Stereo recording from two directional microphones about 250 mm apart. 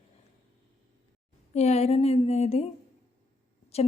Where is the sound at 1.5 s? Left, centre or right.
Left.